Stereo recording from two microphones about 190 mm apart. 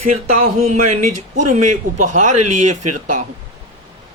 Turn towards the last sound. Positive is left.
turn(degrees=-40)  # may be behind; listen again after turning